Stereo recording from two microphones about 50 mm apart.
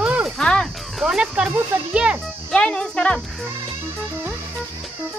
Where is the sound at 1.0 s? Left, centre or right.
Centre.